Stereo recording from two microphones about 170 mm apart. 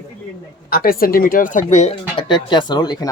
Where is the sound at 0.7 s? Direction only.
60° left (ahead or behind); by 2.0 s 45° left (ahead or behind).